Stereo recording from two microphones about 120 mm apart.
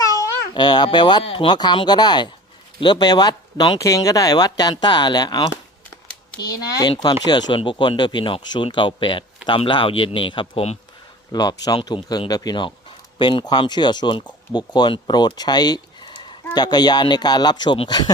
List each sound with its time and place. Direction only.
0.2 s a child's voice: 35° left (ahead or behind)
11.3 s speech: 35° left (ahead or behind)